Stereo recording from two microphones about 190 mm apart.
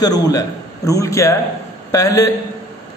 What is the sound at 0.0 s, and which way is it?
A man's voice, 20° left (ahead or behind).